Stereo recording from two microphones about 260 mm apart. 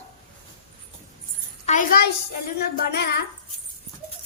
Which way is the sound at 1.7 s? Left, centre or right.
Left.